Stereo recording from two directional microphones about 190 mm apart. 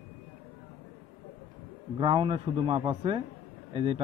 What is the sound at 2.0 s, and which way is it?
Speech, 25° right (ahead or behind).